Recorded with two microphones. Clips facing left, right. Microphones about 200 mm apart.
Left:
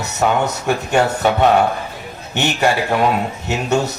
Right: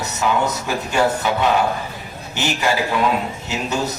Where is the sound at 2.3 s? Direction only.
60° left (ahead or behind).